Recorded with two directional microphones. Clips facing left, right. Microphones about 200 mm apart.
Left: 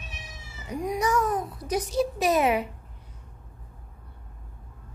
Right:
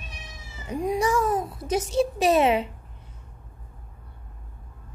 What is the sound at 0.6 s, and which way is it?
A child's voice, 30° right (ahead or behind).